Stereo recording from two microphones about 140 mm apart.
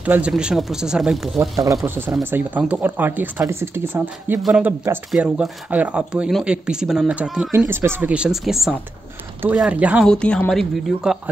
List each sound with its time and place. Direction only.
0.0 s speech: 10° right (ahead or behind)
1.4 s speech: 25° right (ahead or behind)
4.4 s speech: centre (ahead or behind)
10.0 s speech: 5° left (ahead or behind)